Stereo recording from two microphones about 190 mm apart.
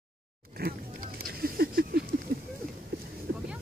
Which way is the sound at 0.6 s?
55° right (ahead or behind).